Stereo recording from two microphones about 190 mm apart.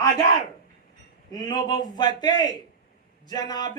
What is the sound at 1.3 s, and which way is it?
Speech, 20° left (ahead or behind).